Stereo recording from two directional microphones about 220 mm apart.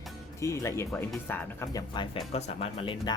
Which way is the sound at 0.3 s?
15° left (ahead or behind).